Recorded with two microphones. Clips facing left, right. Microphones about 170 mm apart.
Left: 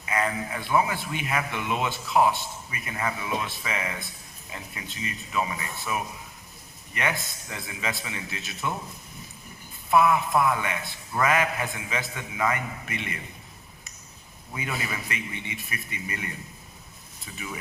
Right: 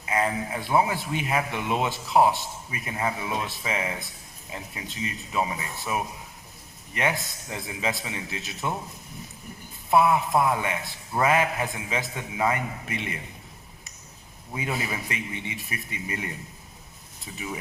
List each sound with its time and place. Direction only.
0.0 s a man's voice: 25° right (ahead or behind)
7.5 s a man's voice: 25° right (ahead or behind)
9.9 s a man's voice: 30° right (ahead or behind)
14.5 s a man's voice: 25° right (ahead or behind)
17.3 s a man's voice: 25° right (ahead or behind)